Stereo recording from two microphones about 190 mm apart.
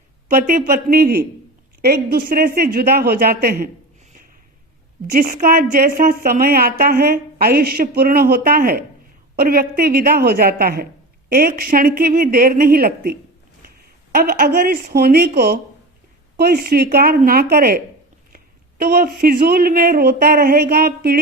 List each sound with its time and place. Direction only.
0.3 s a woman's voice: 50° right (ahead or behind)
5.1 s a woman's voice: 45° right (ahead or behind)
16.4 s a woman's voice: 55° right (ahead or behind)
18.8 s a woman's voice: 50° right (ahead or behind)